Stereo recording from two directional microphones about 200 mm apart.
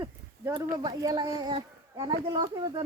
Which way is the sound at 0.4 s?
20° right (ahead or behind).